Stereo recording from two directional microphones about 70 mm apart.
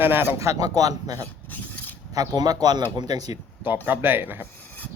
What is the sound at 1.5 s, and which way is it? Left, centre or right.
Mechanisms, left.